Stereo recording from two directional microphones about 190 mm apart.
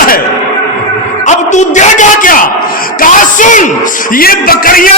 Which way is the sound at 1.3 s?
40° left (ahead or behind).